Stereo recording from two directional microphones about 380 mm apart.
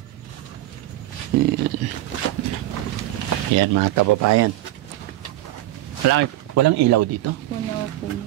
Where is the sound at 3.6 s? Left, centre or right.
Right.